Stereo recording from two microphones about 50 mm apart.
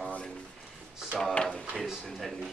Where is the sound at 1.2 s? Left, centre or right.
Centre.